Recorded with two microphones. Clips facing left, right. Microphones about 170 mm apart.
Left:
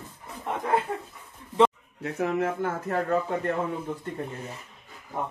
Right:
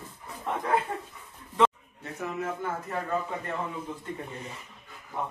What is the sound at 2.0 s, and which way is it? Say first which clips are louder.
Speech: left 7 dB; 70° left (ahead or behind).